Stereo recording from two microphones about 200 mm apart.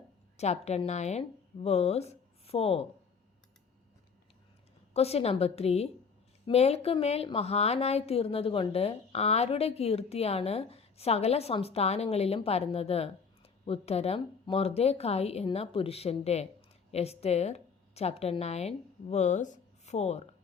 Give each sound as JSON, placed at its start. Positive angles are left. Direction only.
{"t": 0.3, "sound": "speech", "side_deg": 35}
{"t": 4.9, "sound": "a woman's voice", "side_deg": 30}